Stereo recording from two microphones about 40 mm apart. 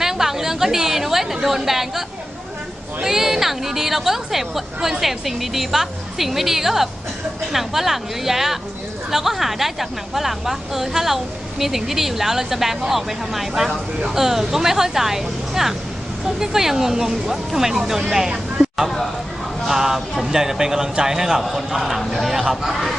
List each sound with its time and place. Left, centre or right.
0.0 s a woman's voice: centre
18.6 s a sound: centre
19.6 s a woman's voice: centre